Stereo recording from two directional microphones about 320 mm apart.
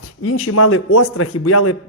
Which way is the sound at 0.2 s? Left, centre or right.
Left.